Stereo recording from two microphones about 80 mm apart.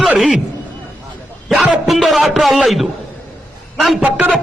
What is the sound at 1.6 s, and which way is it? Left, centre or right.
A man's voice, centre.